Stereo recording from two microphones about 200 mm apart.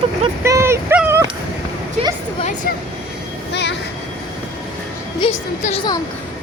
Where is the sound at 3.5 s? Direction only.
60° left (ahead or behind).